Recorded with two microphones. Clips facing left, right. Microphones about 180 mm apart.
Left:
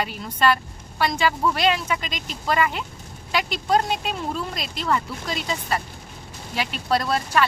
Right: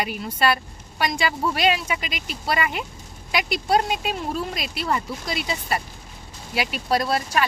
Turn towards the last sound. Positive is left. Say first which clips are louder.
# left 1 dB
turn(degrees=-10)  # may be behind; listen again after turning